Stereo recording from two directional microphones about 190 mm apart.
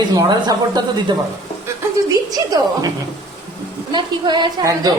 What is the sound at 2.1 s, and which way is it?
Speech, 20° right (ahead or behind).